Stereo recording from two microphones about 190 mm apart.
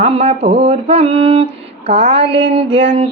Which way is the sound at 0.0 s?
35° right (ahead or behind).